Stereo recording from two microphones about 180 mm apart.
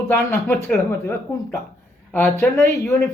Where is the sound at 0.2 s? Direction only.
15° left (ahead or behind).